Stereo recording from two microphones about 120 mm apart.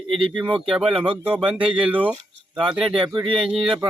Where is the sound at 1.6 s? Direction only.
50° right (ahead or behind).